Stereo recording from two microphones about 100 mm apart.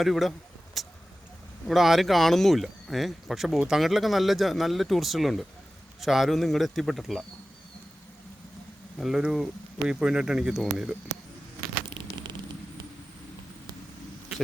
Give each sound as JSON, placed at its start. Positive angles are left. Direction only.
{"t": 0.0, "sound": "speech", "side_deg": 0}
{"t": 9.0, "sound": "speech", "side_deg": -5}
{"t": 11.9, "sound": "a sound", "side_deg": -50}